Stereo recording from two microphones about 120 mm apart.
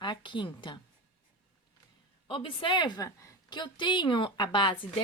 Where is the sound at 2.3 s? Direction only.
45° left (ahead or behind).